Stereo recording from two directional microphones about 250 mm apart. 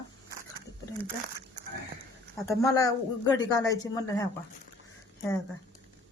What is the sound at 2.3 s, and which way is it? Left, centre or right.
Speech, centre.